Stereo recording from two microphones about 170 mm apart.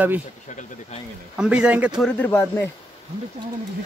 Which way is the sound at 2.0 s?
5° left (ahead or behind).